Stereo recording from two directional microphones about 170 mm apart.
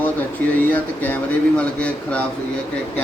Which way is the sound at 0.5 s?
10° left (ahead or behind).